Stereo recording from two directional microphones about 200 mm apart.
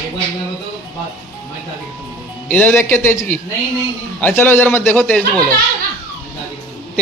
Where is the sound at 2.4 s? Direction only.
10° left (ahead or behind).